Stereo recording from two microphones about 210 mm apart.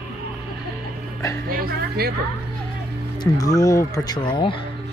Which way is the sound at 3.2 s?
15° left (ahead or behind).